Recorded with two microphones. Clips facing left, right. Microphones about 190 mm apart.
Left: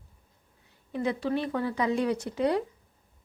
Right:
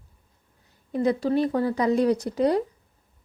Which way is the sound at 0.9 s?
40° right (ahead or behind).